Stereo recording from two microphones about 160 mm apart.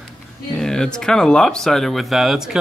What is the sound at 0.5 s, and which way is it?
Speech, 5° left (ahead or behind).